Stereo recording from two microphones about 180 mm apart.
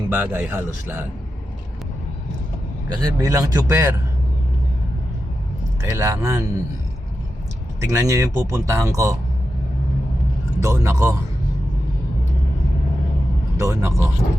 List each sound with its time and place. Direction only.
0.1 s speech: 10° right (ahead or behind)
2.9 s a man's voice: 25° right (ahead or behind)
5.8 s speech: 15° right (ahead or behind)
7.8 s speech: 15° right (ahead or behind)
10.6 s speech: 15° right (ahead or behind)
13.6 s speech: 15° right (ahead or behind)